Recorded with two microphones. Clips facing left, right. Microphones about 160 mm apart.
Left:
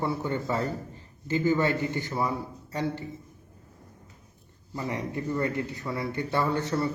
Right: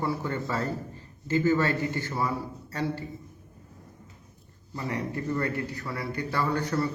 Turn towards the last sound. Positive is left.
turn(degrees=25)  # may be behind; listen again after turning